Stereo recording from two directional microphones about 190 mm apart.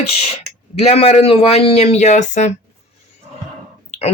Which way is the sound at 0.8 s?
35° left (ahead or behind).